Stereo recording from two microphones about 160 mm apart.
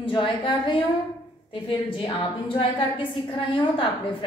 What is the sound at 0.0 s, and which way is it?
A woman's voice, 30° left (ahead or behind).